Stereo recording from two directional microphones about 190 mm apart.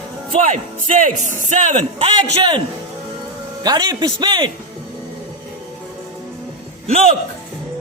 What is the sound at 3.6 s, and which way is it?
Speech, 20° right (ahead or behind).